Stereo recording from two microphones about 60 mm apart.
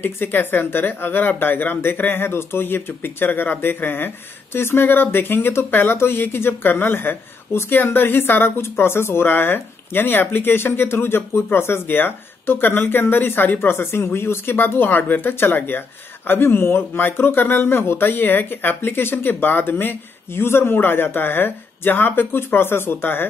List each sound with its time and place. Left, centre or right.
0.0 s speech: left